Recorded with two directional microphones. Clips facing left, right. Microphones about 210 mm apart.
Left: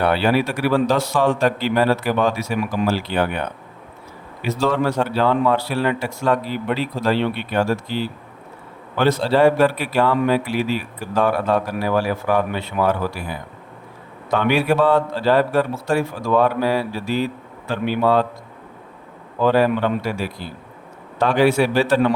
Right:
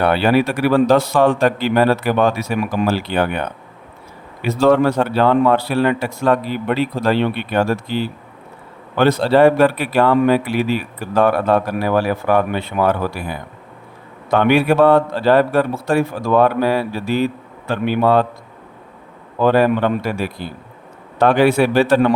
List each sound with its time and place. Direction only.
0.0 s a man's voice: 60° right (ahead or behind)
4.4 s a man's voice: 55° right (ahead or behind)
19.4 s a man's voice: 55° right (ahead or behind)